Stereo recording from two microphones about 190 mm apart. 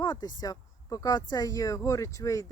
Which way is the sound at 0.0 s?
20° left (ahead or behind).